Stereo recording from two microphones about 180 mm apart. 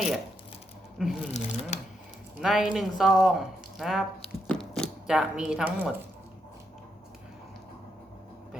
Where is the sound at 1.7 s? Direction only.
40° left (ahead or behind).